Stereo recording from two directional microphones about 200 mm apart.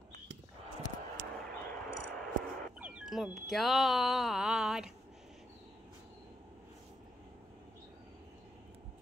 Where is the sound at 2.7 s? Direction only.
5° right (ahead or behind).